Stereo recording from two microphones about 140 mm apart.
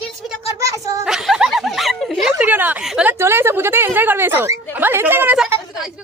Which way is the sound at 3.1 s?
15° right (ahead or behind).